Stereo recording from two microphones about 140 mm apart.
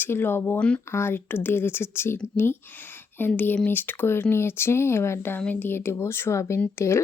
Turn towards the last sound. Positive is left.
turn(degrees=20)  # may be behind; listen again after turning